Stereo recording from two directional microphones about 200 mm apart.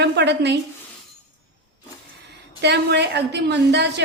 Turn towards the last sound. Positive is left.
turn(degrees=-55)  # may be behind; listen again after turning